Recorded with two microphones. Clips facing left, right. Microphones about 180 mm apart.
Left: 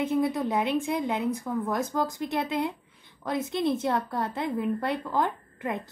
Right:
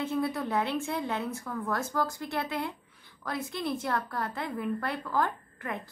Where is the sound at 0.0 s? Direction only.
20° left (ahead or behind).